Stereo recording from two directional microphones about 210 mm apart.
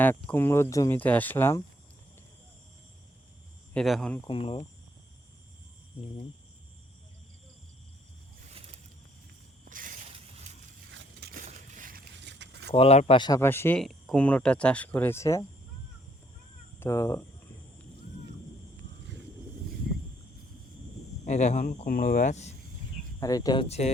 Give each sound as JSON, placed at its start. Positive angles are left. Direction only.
{"t": 0.0, "sound": "speech", "side_deg": 10}
{"t": 3.8, "sound": "speech", "side_deg": 0}
{"t": 4.2, "sound": "speech", "side_deg": 25}
{"t": 9.6, "sound": "a sound", "side_deg": -40}
{"t": 10.9, "sound": "a sound", "side_deg": -50}
{"t": 11.4, "sound": "a sound", "side_deg": -35}
{"t": 12.7, "sound": "speech", "side_deg": 30}
{"t": 16.8, "sound": "speech", "side_deg": 15}
{"t": 21.2, "sound": "speech", "side_deg": 35}
{"t": 23.2, "sound": "speech", "side_deg": 15}
{"t": 23.6, "sound": "speech", "side_deg": 30}